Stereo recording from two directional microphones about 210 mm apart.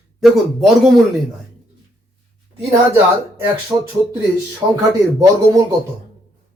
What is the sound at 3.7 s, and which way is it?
Speech, 20° right (ahead or behind).